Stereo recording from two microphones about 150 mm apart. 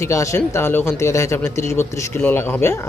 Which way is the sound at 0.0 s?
20° left (ahead or behind).